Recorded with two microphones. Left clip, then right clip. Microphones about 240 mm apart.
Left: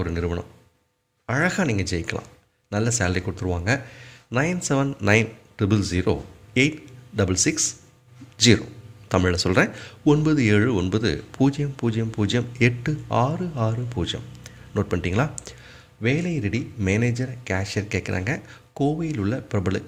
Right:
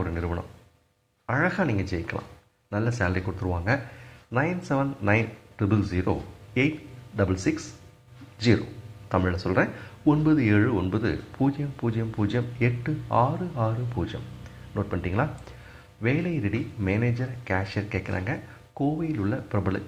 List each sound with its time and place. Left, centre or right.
0.0 s speech: left
4.3 s speech: left
9.0 s speech: left